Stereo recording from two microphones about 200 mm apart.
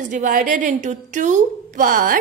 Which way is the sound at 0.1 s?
45° right (ahead or behind).